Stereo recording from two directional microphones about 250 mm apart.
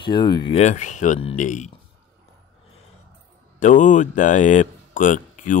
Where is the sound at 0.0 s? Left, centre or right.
Centre.